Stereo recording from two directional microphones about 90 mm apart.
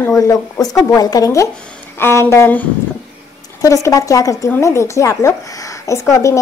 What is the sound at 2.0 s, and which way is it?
Speech, 30° left (ahead or behind).